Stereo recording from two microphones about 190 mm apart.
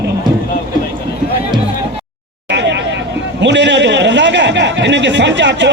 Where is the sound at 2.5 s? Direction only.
65° right (ahead or behind).